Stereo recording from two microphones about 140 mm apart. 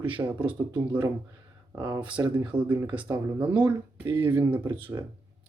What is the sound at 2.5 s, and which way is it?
Speech, 35° right (ahead or behind).